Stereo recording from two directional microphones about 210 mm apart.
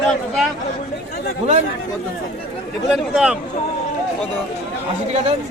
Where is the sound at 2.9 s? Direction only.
5° right (ahead or behind).